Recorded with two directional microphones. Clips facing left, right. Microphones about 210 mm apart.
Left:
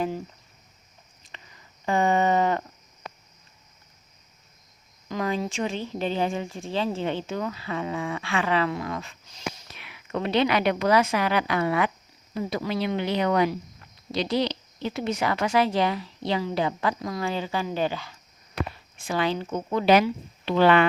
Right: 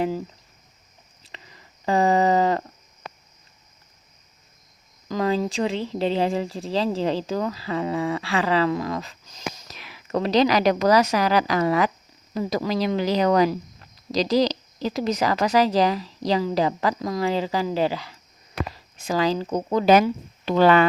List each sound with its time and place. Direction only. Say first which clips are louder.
1.3 s a sound: right 3 dB; 30° right (ahead or behind)
5.0 s speech: right 5 dB; 35° right (ahead or behind)
14.9 s speech: right 4 dB; 40° right (ahead or behind)